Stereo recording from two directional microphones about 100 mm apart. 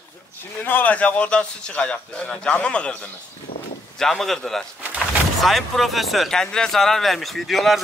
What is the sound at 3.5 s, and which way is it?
Speech, 65° left (ahead or behind).